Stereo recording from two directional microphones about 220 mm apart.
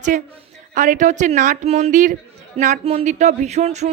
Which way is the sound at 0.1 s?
40° right (ahead or behind).